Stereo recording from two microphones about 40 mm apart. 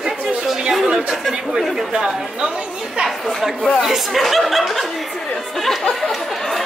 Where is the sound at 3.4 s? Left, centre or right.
Centre.